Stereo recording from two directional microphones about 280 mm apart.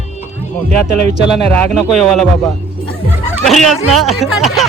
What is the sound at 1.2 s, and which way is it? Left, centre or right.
Speech, centre.